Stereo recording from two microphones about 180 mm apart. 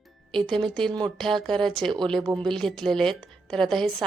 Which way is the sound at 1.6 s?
25° right (ahead or behind).